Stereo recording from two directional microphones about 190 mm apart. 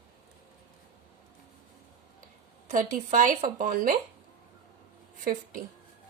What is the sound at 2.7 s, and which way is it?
A woman's voice, 45° right (ahead or behind).